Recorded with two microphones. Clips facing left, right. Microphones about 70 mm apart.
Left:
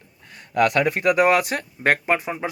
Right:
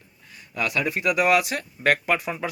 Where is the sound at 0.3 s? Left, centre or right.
Left.